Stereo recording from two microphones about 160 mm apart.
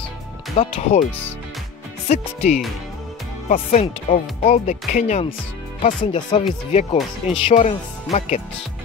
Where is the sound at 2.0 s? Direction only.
45° left (ahead or behind).